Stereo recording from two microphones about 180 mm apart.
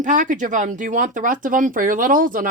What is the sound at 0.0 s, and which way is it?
Speech, 45° right (ahead or behind).